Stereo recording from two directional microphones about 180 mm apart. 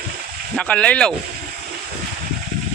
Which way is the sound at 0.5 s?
5° left (ahead or behind).